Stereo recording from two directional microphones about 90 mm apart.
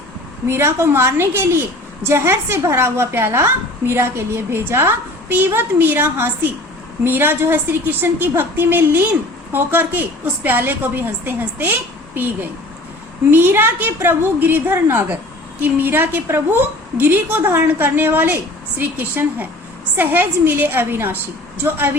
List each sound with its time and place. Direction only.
0.4 s a woman's voice: 30° right (ahead or behind)